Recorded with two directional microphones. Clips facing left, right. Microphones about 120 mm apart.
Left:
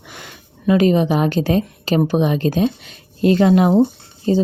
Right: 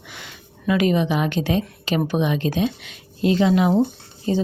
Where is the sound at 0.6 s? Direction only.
35° left (ahead or behind).